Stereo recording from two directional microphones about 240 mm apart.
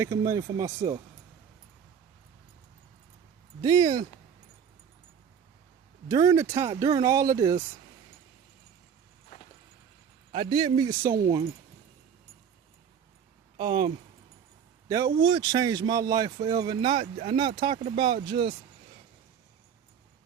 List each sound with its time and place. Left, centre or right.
0.0 s speech: centre
3.8 s speech: centre
6.1 s speech: centre
10.3 s speech: centre
13.6 s speech: centre